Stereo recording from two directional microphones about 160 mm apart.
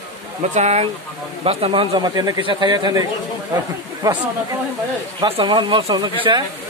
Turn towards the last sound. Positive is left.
turn(degrees=-30)  # may be behind; listen again after turning